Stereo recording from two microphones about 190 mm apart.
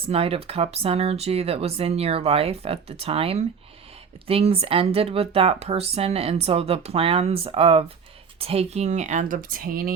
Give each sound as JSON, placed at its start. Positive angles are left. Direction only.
{"t": 0.0, "sound": "speech", "side_deg": -30}